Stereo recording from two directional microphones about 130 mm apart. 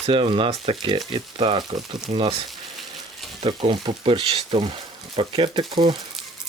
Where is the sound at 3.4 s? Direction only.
40° right (ahead or behind).